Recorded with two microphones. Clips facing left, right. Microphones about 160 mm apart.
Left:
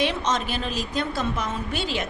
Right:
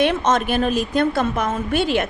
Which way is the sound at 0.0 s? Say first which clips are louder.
Right 6 dB; 50° right (ahead or behind).